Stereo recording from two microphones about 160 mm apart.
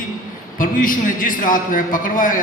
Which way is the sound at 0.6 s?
55° left (ahead or behind).